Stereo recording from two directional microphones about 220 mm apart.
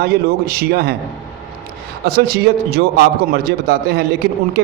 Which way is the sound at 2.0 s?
45° right (ahead or behind).